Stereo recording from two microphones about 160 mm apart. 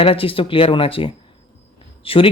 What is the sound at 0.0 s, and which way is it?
Speech, 35° left (ahead or behind).